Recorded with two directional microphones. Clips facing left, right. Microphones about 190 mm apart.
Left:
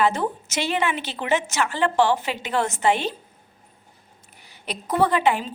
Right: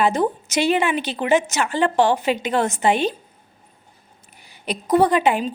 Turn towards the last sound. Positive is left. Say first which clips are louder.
# right 3 dB
turn(degrees=-15)  # may be behind; listen again after turning